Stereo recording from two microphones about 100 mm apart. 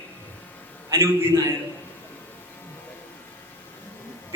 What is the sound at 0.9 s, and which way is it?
Speech, 30° right (ahead or behind).